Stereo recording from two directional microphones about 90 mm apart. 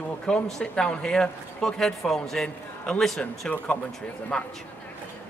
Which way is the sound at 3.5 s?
15° left (ahead or behind).